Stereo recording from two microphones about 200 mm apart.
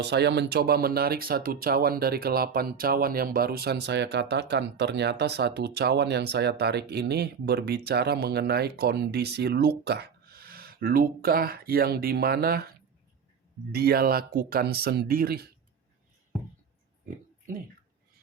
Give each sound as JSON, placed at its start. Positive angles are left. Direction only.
{"t": 0.0, "sound": "speech", "side_deg": -55}
{"t": 13.7, "sound": "speech", "side_deg": -50}